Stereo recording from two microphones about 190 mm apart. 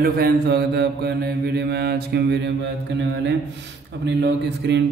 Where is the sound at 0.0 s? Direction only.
55° right (ahead or behind).